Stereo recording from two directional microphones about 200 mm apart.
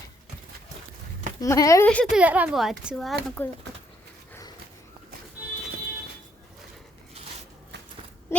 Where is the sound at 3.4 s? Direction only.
10° left (ahead or behind).